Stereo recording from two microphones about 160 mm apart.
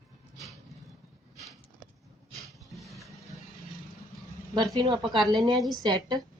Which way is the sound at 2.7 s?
Centre (ahead or behind).